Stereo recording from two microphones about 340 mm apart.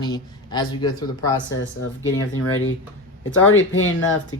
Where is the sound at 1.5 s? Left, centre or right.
Left.